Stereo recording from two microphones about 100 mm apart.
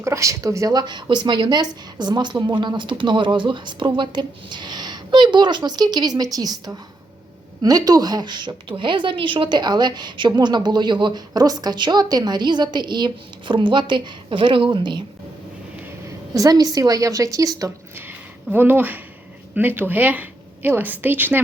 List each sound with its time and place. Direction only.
0.0 s a woman's voice: 30° right (ahead or behind); by 15.0 s 50° right (ahead or behind)
16.0 s a woman's voice: 35° right (ahead or behind)
18.5 s a woman's voice: 20° right (ahead or behind)